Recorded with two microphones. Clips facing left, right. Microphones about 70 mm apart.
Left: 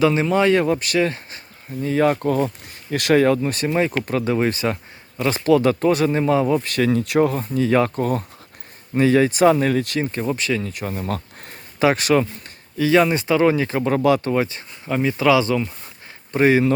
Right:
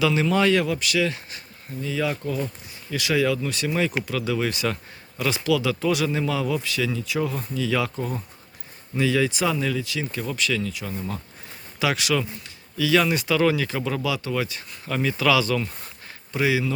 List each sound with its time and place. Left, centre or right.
0.0 s speech: left
6.7 s speech: left
9.0 s speech: left
10.0 s speech: left
10.7 s speech: left
11.8 s speech: left
14.3 s speech: left
14.8 s speech: left
16.3 s speech: left